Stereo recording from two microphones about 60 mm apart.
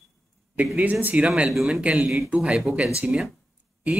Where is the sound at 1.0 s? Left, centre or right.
Right.